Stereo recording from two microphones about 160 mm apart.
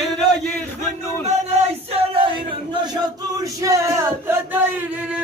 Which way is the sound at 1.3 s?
45° right (ahead or behind).